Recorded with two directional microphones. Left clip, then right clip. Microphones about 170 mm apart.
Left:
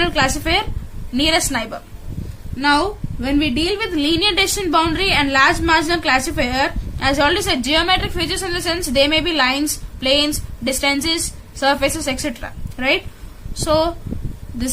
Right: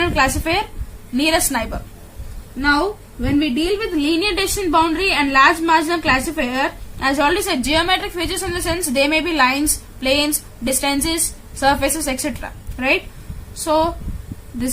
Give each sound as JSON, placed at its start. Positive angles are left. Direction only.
{"t": 0.0, "sound": "a woman's voice", "side_deg": 10}
{"t": 2.6, "sound": "a woman's voice", "side_deg": 25}